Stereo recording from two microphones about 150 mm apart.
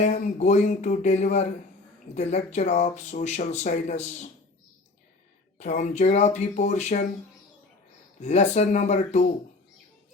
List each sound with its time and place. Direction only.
0.0 s speech: 55° left (ahead or behind)
5.5 s speech: 50° left (ahead or behind)
8.2 s speech: 50° left (ahead or behind)